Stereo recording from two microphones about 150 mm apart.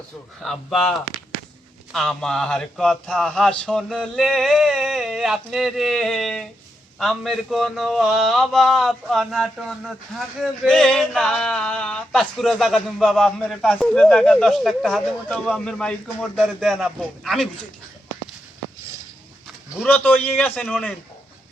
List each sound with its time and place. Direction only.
0.4 s a man's voice: 5° left (ahead or behind)
19.8 s a man's voice: 10° left (ahead or behind)